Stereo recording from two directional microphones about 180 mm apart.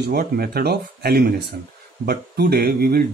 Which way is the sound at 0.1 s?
60° right (ahead or behind).